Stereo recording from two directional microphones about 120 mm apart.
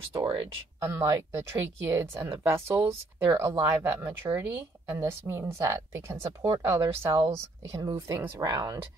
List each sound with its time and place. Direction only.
0.1 s speech: 45° right (ahead or behind)
0.7 s speech: 25° right (ahead or behind)